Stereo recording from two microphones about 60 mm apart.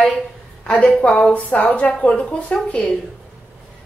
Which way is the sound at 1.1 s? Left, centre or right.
Left.